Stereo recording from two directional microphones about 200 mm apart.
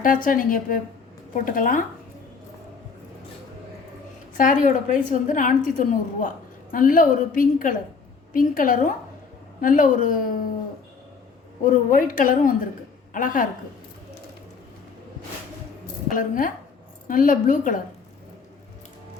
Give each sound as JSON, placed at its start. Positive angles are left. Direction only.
{"t": 0.0, "sound": "a woman's voice", "side_deg": 45}
{"t": 4.4, "sound": "a woman's voice", "side_deg": 40}
{"t": 11.6, "sound": "a woman's voice", "side_deg": 40}
{"t": 16.1, "sound": "a woman's voice", "side_deg": 40}